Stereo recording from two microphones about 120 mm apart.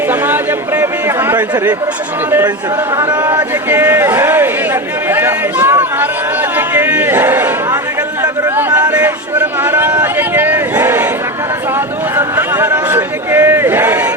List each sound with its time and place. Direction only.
0.1 s chatter: 15° right (ahead or behind)
2.9 s a man's voice: 35° right (ahead or behind)
3.7 s chatter: 20° right (ahead or behind)
6.6 s crowd: 15° right (ahead or behind)
8.2 s a sound: 20° right (ahead or behind)
12.1 s a sound: 20° right (ahead or behind)